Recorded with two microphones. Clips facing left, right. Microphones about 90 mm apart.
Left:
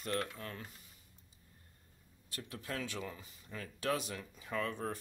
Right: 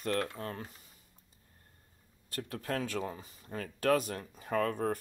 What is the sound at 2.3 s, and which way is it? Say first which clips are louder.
Speech: right 7 dB; 45° right (ahead or behind).